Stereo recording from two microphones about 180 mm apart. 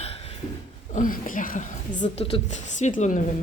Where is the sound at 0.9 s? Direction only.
50° left (ahead or behind).